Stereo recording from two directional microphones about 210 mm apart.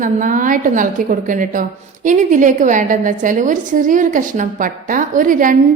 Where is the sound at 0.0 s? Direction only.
40° right (ahead or behind).